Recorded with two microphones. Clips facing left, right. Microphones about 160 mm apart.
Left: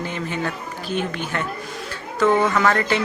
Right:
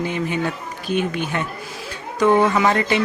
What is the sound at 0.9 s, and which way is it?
Speech, 15° right (ahead or behind).